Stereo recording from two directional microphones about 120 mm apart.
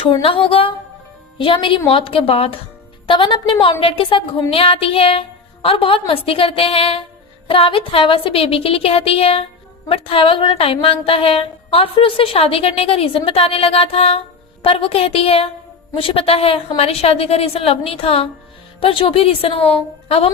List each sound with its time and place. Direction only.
0.2 s a woman's voice: 50° left (ahead or behind)